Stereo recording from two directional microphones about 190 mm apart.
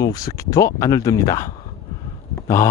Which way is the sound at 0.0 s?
20° left (ahead or behind).